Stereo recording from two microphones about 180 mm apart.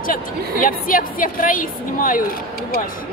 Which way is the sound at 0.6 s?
50° left (ahead or behind).